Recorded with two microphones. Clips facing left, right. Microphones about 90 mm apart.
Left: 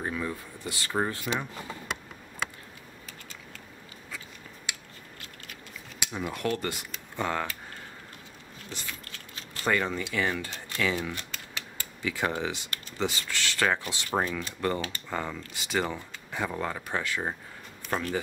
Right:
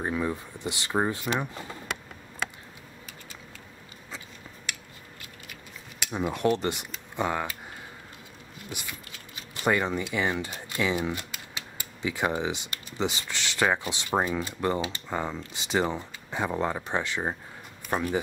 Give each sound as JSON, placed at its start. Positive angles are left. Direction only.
{"t": 0.0, "sound": "speech", "side_deg": -20}
{"t": 6.1, "sound": "speech", "side_deg": -25}
{"t": 8.6, "sound": "keys jangling", "side_deg": -15}
{"t": 10.1, "sound": "speech", "side_deg": -20}